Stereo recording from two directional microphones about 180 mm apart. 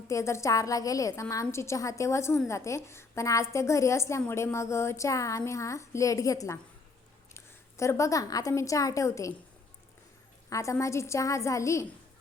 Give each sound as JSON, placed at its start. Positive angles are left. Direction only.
{"t": 0.1, "sound": "a woman's voice", "side_deg": 15}
{"t": 10.5, "sound": "a woman's voice", "side_deg": 15}